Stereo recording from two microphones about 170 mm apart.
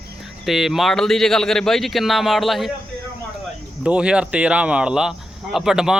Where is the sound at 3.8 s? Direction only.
5° right (ahead or behind).